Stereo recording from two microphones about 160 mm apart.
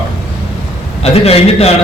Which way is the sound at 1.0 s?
40° left (ahead or behind).